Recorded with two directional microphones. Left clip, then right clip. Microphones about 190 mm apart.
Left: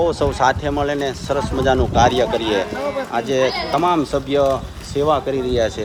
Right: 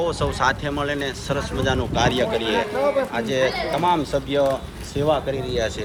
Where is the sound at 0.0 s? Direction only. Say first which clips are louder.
Left 5 dB; 35° left (ahead or behind).